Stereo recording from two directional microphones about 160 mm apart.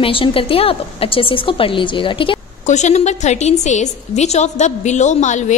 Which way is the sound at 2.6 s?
45° left (ahead or behind).